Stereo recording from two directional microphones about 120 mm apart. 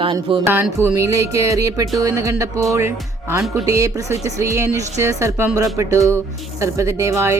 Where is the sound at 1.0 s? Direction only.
25° right (ahead or behind).